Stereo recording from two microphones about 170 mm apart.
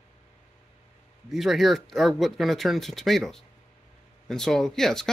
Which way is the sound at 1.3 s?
Centre (ahead or behind).